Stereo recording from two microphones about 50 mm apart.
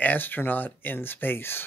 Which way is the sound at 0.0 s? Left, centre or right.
Left.